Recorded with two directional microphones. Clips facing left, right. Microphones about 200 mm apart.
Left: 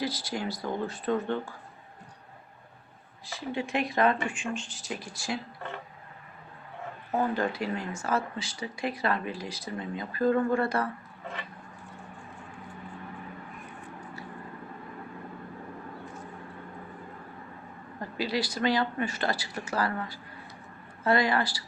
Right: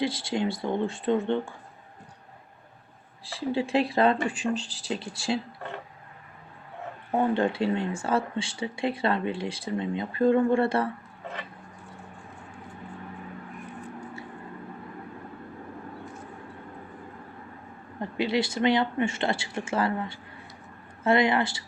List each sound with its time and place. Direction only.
0.0 s speech: 25° right (ahead or behind)
3.2 s speech: 30° right (ahead or behind)
7.2 s speech: 30° right (ahead or behind)
18.0 s speech: 25° right (ahead or behind)